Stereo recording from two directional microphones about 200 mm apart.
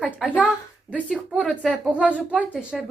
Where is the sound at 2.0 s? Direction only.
5° left (ahead or behind).